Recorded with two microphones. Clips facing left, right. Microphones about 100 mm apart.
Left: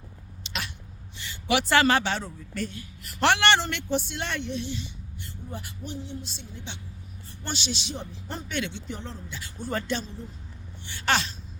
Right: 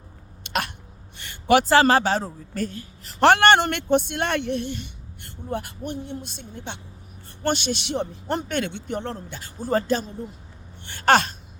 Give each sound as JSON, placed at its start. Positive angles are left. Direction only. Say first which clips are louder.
{"t": 0.4, "sound": "hiccup", "louder": "right 9 dB", "side_deg": -55}
{"t": 1.2, "sound": "a man's voice", "louder": "right 8 dB", "side_deg": -50}
{"t": 3.3, "sound": "speech", "louder": "right 6 dB", "side_deg": -50}
{"t": 9.4, "sound": "speech", "louder": "right 8 dB", "side_deg": -40}
{"t": 10.8, "sound": "gasp", "louder": "right 8 dB", "side_deg": -50}